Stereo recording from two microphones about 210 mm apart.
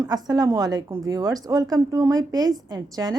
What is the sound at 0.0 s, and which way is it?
A woman's voice, 20° right (ahead or behind).